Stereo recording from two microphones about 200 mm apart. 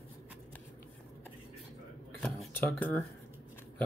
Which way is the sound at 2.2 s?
5° left (ahead or behind).